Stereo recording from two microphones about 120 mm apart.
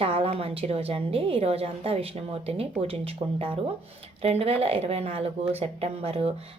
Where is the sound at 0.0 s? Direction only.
55° right (ahead or behind).